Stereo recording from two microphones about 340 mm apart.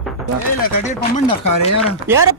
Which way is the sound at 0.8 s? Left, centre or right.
Left.